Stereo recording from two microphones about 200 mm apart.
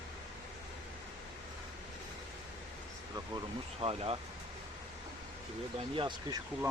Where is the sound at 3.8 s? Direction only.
30° right (ahead or behind).